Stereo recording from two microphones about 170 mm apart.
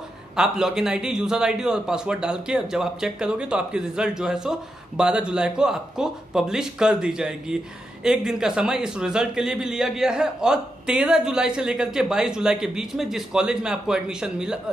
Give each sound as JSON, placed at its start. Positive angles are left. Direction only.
{"t": 0.4, "sound": "a man's voice", "side_deg": -5}